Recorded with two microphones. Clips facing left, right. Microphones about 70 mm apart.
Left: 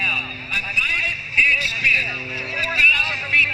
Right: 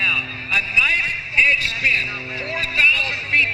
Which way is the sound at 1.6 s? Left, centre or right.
Right.